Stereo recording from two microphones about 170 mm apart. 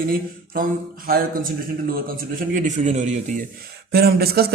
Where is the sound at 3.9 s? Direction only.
65° right (ahead or behind).